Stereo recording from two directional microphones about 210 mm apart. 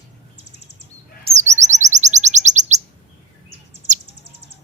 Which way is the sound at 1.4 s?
35° right (ahead or behind).